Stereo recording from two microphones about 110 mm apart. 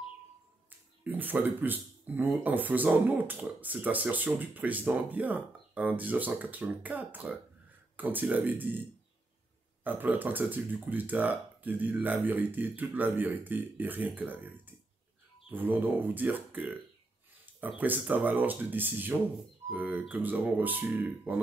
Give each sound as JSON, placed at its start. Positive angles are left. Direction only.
{"t": 0.7, "sound": "speech", "side_deg": -15}
{"t": 9.8, "sound": "speech", "side_deg": -15}